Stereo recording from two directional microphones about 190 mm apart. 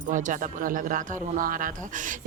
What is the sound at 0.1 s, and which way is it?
Speech, 40° right (ahead or behind).